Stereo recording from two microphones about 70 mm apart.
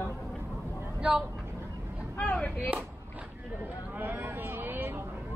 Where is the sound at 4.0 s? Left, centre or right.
Right.